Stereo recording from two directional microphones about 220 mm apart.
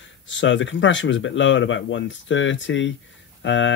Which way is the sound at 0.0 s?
55° left (ahead or behind).